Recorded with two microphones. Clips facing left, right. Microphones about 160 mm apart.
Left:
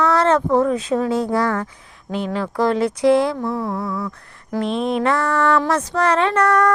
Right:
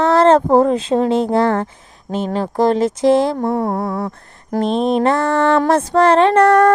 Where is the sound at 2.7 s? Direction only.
45° right (ahead or behind).